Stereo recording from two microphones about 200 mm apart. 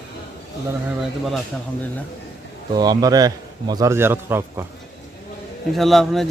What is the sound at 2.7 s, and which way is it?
A man's voice, 20° right (ahead or behind).